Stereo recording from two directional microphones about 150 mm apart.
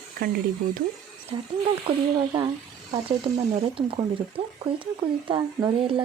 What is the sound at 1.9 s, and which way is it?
Speech, 35° right (ahead or behind).